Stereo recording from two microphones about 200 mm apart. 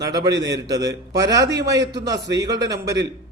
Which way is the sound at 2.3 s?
15° right (ahead or behind).